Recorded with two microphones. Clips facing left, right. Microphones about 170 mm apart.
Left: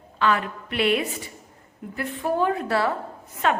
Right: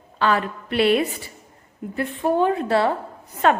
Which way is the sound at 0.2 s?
35° right (ahead or behind).